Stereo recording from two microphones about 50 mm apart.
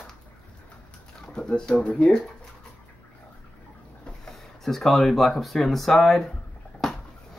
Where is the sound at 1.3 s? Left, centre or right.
Centre.